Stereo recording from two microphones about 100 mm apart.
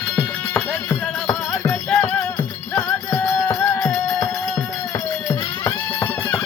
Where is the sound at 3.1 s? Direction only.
35° left (ahead or behind).